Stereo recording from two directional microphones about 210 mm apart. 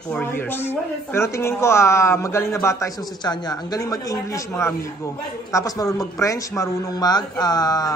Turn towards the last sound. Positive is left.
turn(degrees=20)  # may be behind; listen again after turning